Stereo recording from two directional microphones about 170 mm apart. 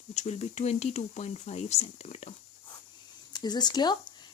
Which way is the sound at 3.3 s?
25° left (ahead or behind).